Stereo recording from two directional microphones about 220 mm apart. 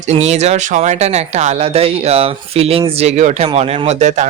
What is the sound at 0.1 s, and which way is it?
Speech, 30° right (ahead or behind).